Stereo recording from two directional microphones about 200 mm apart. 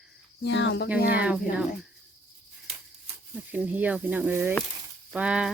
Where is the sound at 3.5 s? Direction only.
10° right (ahead or behind).